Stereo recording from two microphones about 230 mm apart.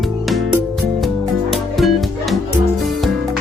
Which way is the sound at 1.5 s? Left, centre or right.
Centre.